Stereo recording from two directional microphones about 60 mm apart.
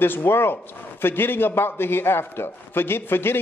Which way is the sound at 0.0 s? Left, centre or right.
Left.